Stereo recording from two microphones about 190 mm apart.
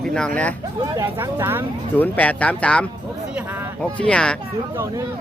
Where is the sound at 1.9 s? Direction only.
10° left (ahead or behind).